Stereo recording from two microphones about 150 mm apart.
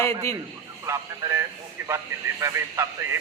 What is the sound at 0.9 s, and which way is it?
A man's voice, 20° right (ahead or behind).